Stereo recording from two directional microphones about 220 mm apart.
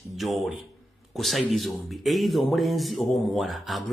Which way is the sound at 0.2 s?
Centre (ahead or behind).